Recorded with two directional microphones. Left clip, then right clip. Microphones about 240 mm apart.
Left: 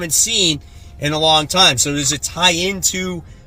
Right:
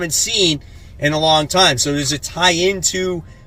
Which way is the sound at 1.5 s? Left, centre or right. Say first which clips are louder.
Even; centre.